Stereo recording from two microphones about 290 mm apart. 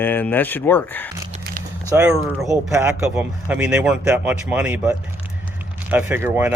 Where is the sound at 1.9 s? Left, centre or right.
Centre.